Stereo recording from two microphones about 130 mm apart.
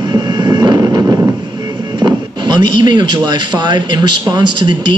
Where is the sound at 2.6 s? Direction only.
35° right (ahead or behind).